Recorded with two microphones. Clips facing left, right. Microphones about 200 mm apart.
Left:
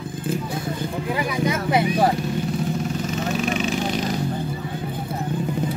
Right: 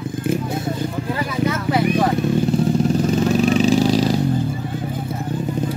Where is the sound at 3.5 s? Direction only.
35° right (ahead or behind).